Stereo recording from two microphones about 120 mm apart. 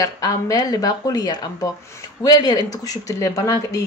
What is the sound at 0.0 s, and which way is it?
Speech, 30° left (ahead or behind).